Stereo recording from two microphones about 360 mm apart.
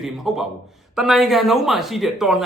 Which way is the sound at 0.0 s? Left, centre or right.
Centre.